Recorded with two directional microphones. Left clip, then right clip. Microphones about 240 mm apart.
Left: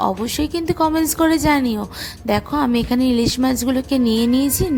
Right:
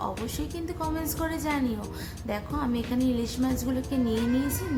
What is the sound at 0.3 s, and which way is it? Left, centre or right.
A woman's voice, left.